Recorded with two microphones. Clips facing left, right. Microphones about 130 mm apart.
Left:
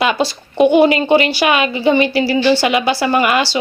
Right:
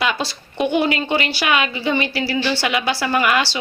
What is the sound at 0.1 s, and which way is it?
Speech, 45° left (ahead or behind).